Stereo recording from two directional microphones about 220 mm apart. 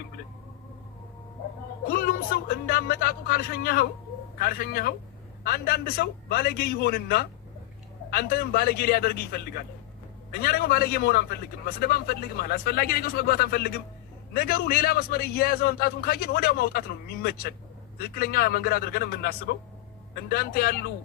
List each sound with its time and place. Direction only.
1.9 s a man's voice: 40° left (ahead or behind)